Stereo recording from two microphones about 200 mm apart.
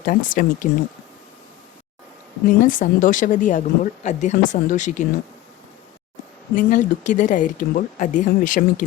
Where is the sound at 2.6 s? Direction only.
40° left (ahead or behind).